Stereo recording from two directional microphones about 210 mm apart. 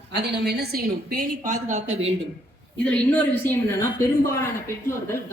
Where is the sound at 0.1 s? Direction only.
50° right (ahead or behind).